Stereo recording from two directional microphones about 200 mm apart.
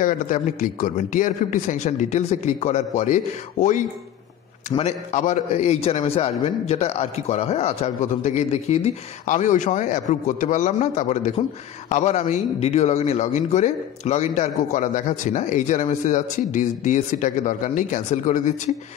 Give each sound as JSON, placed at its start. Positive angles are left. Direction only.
{"t": 0.0, "sound": "a man's voice", "side_deg": 40}